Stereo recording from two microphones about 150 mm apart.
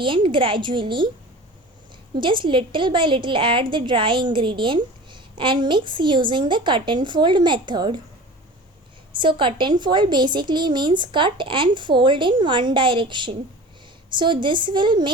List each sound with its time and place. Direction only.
0.0 s a woman's voice: 35° right (ahead or behind)
2.1 s a woman's voice: 35° right (ahead or behind)
9.1 s a woman's voice: 35° right (ahead or behind)